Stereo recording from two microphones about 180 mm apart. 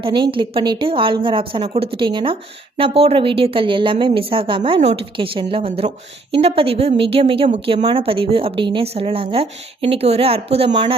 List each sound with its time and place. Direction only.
0.0 s a woman's voice: 30° right (ahead or behind)